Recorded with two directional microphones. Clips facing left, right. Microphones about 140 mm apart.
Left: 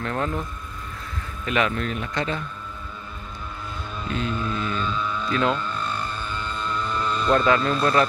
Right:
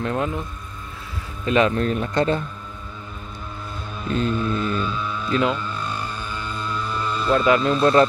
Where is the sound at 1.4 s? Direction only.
30° right (ahead or behind).